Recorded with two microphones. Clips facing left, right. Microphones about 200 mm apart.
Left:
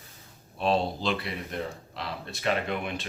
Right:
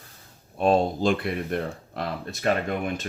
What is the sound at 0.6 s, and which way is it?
Speech, 45° right (ahead or behind).